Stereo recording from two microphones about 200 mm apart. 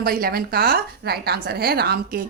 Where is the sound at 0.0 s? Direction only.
45° right (ahead or behind).